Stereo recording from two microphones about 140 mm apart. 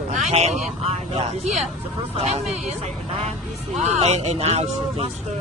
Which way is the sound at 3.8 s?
50° right (ahead or behind).